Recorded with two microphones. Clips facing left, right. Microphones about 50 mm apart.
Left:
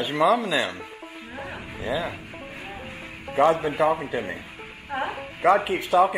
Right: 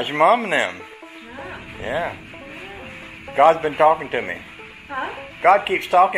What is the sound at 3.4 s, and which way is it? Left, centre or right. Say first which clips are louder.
A man's voice: right 6 dB; right.